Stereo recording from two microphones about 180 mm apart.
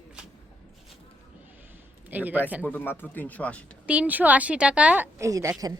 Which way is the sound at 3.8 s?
10° right (ahead or behind).